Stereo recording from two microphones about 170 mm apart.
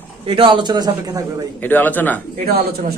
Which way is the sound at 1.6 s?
10° left (ahead or behind).